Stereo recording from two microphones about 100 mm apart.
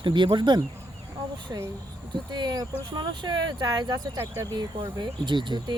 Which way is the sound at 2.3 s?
45° right (ahead or behind).